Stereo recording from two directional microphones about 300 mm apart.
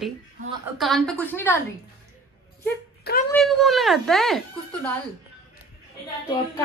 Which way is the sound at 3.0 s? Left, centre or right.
Left.